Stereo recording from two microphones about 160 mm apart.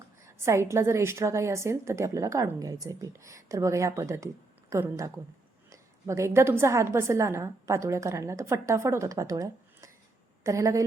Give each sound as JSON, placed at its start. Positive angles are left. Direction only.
{"t": 0.2, "sound": "a woman's voice", "side_deg": -15}